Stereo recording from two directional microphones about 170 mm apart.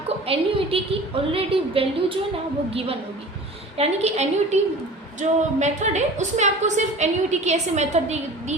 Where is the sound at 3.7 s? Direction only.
40° right (ahead or behind).